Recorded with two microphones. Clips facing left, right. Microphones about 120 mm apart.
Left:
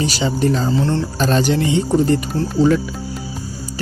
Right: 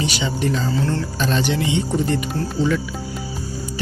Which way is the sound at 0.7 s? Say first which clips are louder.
Left 4 dB; 20° left (ahead or behind).